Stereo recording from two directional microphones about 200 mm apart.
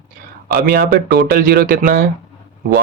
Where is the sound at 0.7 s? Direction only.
50° right (ahead or behind).